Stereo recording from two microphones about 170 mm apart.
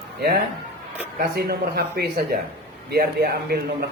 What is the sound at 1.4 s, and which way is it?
A man's voice, 65° right (ahead or behind).